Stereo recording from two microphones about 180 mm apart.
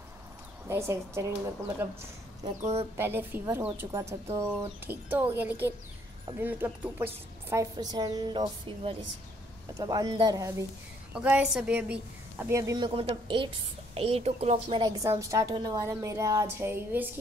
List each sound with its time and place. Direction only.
0.7 s a woman's voice: 15° right (ahead or behind)
2.6 s a woman's voice: 35° right (ahead or behind)
3.0 s a woman's voice: 10° right (ahead or behind)
11.1 s a woman's voice: 5° right (ahead or behind); by 14.8 s 35° right (ahead or behind)
14.8 s a woman's voice: 20° right (ahead or behind)